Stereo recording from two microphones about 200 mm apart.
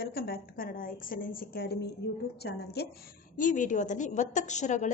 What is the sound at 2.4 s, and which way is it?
Speech, 55° left (ahead or behind).